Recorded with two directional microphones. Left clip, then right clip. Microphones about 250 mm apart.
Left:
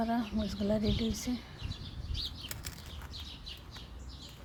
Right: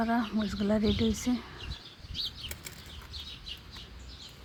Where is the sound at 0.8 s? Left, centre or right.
Left.